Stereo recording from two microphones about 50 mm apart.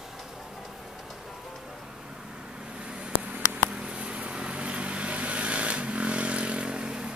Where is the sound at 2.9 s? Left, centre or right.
Right.